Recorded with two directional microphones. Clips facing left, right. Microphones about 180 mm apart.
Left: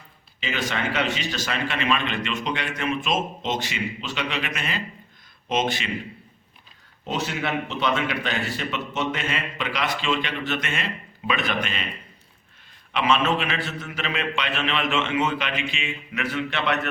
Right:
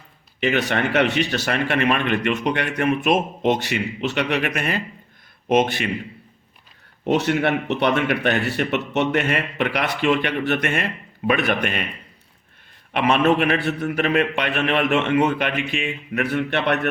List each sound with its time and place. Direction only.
0.3 s speech: 60° right (ahead or behind)
7.0 s speech: 65° right (ahead or behind)
12.9 s speech: 55° right (ahead or behind)